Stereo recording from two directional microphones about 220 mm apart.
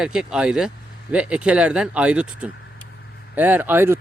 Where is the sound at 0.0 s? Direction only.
5° right (ahead or behind).